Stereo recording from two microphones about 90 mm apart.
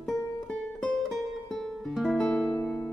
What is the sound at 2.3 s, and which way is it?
Music, 15° left (ahead or behind).